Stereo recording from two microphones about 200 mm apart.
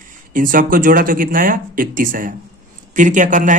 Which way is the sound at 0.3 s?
45° right (ahead or behind).